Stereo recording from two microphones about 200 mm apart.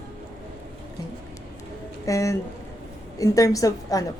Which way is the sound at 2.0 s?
15° left (ahead or behind).